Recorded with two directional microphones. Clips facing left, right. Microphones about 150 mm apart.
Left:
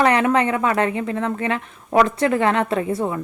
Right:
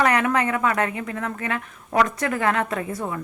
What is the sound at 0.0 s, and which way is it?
A woman's voice, 25° left (ahead or behind).